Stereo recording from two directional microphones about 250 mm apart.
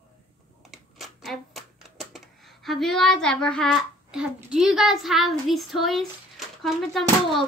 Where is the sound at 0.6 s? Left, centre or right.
Centre.